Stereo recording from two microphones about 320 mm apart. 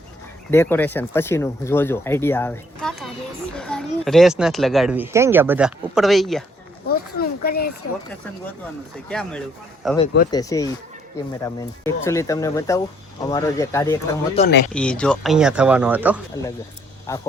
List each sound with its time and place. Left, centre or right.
0.5 s speech: centre
6.8 s a sound: left
9.0 s speech: centre
10.3 s speech: centre
14.3 s speech: left
14.7 s speech: centre
17.1 s speech: centre